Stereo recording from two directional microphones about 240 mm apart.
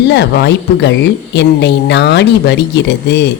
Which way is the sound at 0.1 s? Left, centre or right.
Left.